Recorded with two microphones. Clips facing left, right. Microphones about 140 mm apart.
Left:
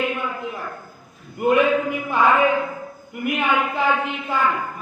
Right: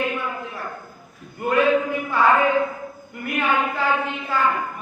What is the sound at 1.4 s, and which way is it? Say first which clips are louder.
Male singing: left 1 dB; 20° left (ahead or behind).